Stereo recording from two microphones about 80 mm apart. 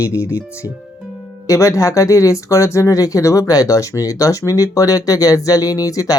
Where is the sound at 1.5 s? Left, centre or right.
Left.